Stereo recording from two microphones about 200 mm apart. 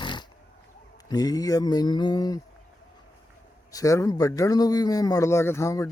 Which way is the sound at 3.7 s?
15° left (ahead or behind).